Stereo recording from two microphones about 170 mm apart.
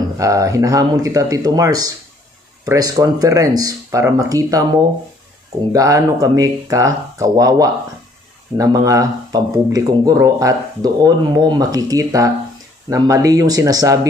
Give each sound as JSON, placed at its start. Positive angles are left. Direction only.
{"t": 0.2, "sound": "speech", "side_deg": -20}